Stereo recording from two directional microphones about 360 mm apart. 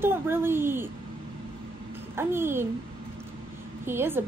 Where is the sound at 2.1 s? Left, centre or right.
Centre.